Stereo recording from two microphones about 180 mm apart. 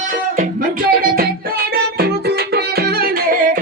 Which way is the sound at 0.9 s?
55° right (ahead or behind).